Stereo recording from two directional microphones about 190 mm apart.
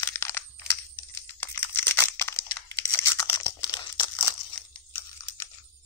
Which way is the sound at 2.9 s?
15° left (ahead or behind).